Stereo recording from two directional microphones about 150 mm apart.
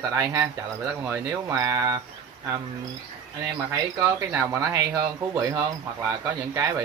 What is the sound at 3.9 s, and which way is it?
Speech, 20° right (ahead or behind).